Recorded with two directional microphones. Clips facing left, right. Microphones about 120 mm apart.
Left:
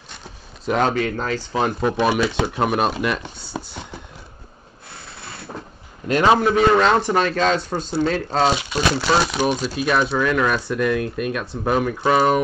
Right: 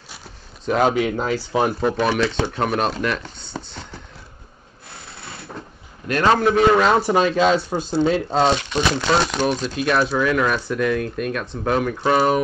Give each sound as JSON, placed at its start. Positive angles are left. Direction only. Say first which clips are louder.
{"t": 0.7, "sound": "speech", "louder": "right 1 dB", "side_deg": -5}
{"t": 0.9, "sound": "speech", "louder": "right 2 dB", "side_deg": -15}
{"t": 2.0, "sound": "speech", "louder": "left 1 dB", "side_deg": 10}
{"t": 3.3, "sound": "a sound", "louder": "left 2 dB", "side_deg": 10}
{"t": 6.0, "sound": "speech", "louder": "left 2 dB", "side_deg": 15}
{"t": 6.4, "sound": "speech", "louder": "even", "side_deg": 0}
{"t": 8.1, "sound": "speech", "louder": "right 1 dB", "side_deg": 0}